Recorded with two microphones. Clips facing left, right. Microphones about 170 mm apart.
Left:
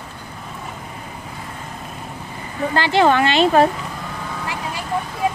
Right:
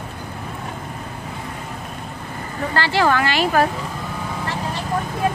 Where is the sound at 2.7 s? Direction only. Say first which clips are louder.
Left 3 dB; 20° left (ahead or behind).